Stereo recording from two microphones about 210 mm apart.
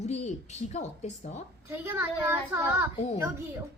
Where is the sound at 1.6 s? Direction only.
10° right (ahead or behind).